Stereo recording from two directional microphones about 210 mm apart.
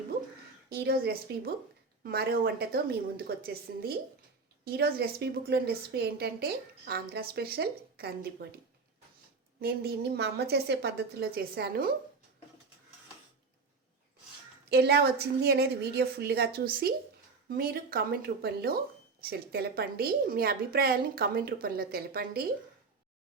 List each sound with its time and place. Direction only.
0.7 s a woman's voice: 50° right (ahead or behind)
9.6 s a woman's voice: 50° right (ahead or behind)
14.7 s a woman's voice: 50° right (ahead or behind)